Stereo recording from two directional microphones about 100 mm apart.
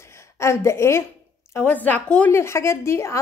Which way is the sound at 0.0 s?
30° left (ahead or behind).